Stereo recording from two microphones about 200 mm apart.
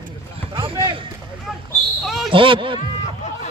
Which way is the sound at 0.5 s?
25° right (ahead or behind).